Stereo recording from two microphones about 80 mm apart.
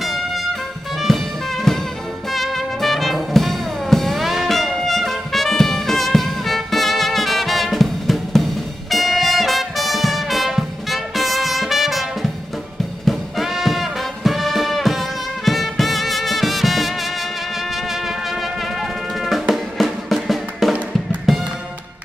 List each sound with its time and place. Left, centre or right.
0.0 s music: centre
13.0 s brass instrument: centre
18.8 s music: centre